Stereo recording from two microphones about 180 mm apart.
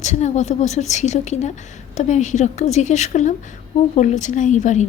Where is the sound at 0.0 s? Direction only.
40° left (ahead or behind).